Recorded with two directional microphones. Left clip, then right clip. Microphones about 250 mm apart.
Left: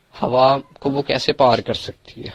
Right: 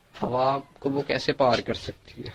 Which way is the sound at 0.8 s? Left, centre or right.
Left.